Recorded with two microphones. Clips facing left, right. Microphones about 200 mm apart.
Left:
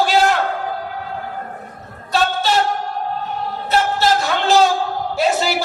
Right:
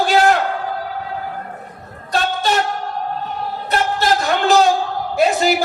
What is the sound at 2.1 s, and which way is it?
Vehicle, 50° right (ahead or behind).